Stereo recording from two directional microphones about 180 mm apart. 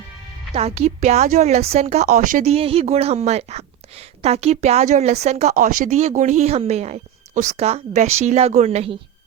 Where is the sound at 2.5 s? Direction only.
35° right (ahead or behind).